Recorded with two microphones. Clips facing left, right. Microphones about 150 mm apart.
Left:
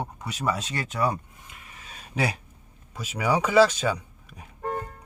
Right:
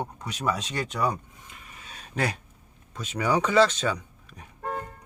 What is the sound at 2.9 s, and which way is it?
Speech, 5° left (ahead or behind).